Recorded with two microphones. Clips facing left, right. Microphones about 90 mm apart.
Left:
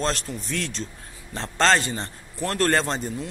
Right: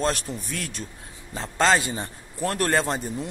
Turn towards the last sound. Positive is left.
turn(degrees=-5)  # may be behind; listen again after turning